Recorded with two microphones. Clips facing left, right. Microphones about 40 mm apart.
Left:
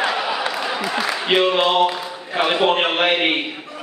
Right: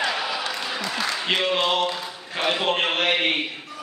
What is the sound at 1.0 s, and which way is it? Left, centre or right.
A man's voice, centre.